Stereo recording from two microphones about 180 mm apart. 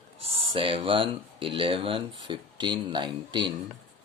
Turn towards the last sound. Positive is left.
turn(degrees=-25)  # may be behind; listen again after turning